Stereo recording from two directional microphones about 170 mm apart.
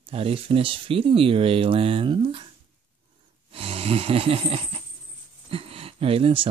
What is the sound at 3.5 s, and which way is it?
Snoring, 35° right (ahead or behind).